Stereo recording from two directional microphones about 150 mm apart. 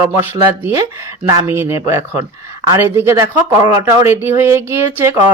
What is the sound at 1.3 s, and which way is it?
Speech, 15° right (ahead or behind).